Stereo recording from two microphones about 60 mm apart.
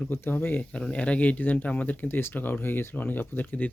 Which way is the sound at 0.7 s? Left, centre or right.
Centre.